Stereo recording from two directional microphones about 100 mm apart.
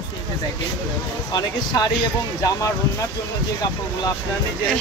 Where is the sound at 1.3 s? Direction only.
40° left (ahead or behind).